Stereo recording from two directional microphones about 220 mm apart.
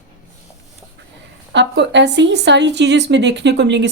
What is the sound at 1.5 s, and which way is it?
A woman's voice, 50° right (ahead or behind).